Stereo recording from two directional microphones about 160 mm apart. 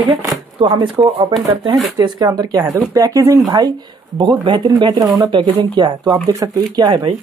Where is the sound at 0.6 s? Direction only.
30° right (ahead or behind).